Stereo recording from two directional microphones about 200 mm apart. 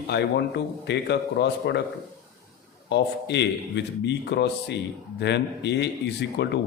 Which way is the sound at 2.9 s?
60° left (ahead or behind).